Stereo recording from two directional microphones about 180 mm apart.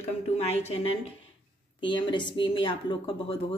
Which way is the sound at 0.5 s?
35° left (ahead or behind).